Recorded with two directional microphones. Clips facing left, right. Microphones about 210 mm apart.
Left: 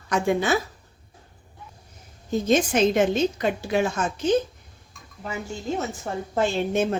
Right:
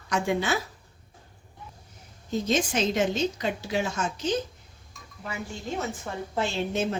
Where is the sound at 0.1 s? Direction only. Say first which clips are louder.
Left 4 dB; 50° left (ahead or behind).